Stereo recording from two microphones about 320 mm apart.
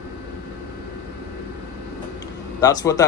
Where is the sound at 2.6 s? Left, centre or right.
Centre.